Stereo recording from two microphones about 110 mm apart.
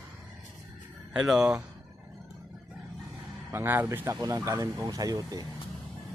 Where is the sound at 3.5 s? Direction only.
20° right (ahead or behind).